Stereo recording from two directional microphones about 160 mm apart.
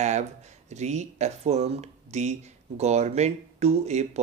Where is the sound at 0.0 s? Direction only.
45° right (ahead or behind).